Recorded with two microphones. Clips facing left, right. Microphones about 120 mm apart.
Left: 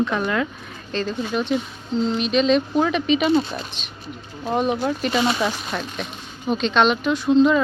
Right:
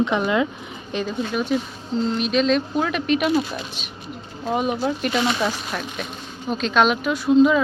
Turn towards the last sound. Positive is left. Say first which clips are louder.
# even
turn(degrees=-5)  # may be behind; listen again after turning